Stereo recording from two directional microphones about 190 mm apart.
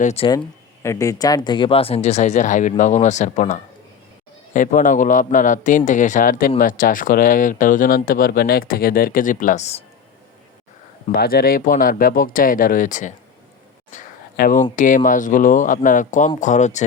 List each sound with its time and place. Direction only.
0.0 s speech: 35° left (ahead or behind)
0.3 s speech: 15° left (ahead or behind); by 9.8 s 35° left (ahead or behind)
11.2 s speech: 50° left (ahead or behind)
13.9 s a sound: 45° left (ahead or behind)
14.8 s speech: 45° left (ahead or behind)